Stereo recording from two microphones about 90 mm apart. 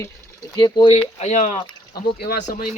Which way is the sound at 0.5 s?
55° left (ahead or behind).